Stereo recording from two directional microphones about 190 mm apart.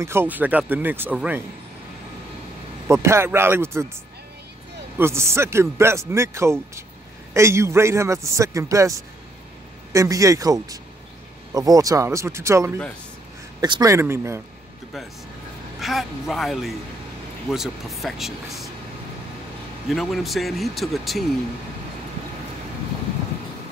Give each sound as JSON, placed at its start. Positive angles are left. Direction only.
{"t": 0.0, "sound": "speech", "side_deg": -10}
{"t": 2.9, "sound": "speech", "side_deg": -15}
{"t": 4.9, "sound": "speech", "side_deg": -15}
{"t": 9.9, "sound": "speech", "side_deg": -15}
{"t": 15.8, "sound": "speech", "side_deg": 0}
{"t": 19.9, "sound": "speech", "side_deg": 0}